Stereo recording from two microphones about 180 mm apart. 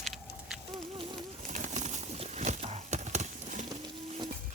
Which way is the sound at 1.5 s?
40° right (ahead or behind).